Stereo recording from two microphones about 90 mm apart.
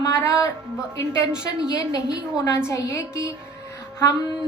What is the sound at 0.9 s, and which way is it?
Speech, 35° left (ahead or behind).